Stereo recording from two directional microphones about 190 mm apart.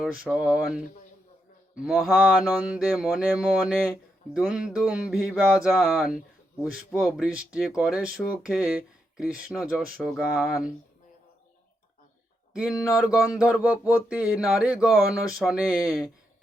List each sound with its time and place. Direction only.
0.0 s speech: 5° right (ahead or behind)
1.8 s speech: 5° right (ahead or behind)
12.7 s speech: 20° left (ahead or behind)
13.3 s speech: 5° right (ahead or behind)